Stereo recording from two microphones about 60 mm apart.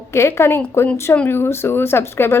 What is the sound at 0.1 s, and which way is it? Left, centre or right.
A woman's voice, left.